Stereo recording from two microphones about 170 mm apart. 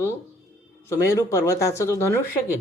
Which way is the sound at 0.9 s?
20° left (ahead or behind).